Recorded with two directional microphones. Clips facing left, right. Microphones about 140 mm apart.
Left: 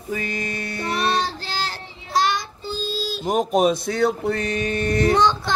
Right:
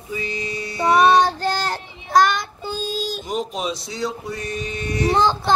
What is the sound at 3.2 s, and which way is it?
Mantra, 50° left (ahead or behind).